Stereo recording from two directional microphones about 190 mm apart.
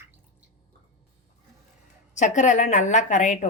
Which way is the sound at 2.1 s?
40° left (ahead or behind).